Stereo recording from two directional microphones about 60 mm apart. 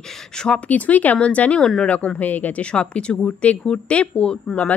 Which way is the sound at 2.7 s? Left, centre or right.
Centre.